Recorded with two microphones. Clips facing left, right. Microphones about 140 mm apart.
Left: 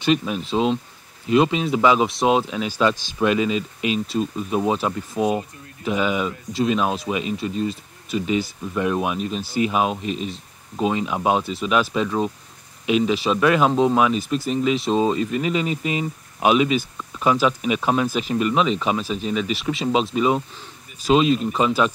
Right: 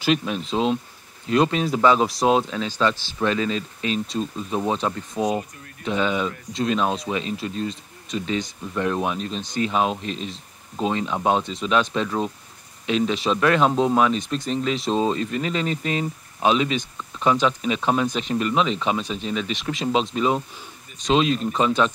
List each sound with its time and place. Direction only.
0.0 s speech: centre (ahead or behind)